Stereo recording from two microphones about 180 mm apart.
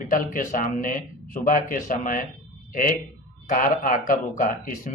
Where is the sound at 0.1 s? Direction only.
50° left (ahead or behind).